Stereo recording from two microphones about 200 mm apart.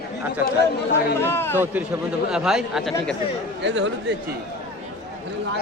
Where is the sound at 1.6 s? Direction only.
10° right (ahead or behind).